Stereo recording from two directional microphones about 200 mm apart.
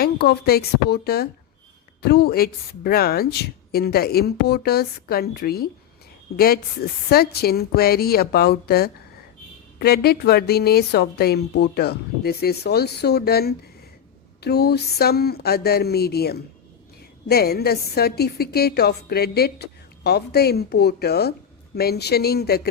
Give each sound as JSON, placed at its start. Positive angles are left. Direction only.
{"t": 0.0, "sound": "a woman's voice", "side_deg": 50}